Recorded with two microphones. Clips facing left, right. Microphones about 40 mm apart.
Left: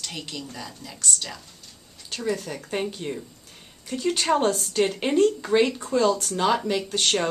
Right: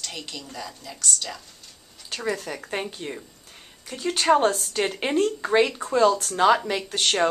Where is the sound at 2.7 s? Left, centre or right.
Centre.